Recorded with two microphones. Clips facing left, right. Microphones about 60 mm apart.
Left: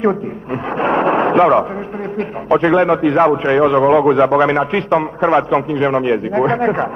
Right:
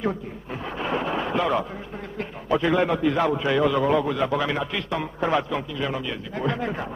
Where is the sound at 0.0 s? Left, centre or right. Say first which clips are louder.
Left 11 dB; left.